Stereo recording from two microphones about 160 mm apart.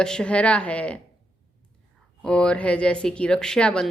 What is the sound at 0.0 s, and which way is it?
Speech, 5° left (ahead or behind).